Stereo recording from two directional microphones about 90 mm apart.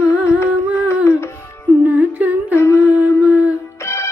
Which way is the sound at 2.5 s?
30° left (ahead or behind).